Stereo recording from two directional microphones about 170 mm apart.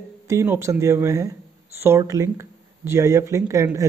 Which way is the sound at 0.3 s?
15° right (ahead or behind).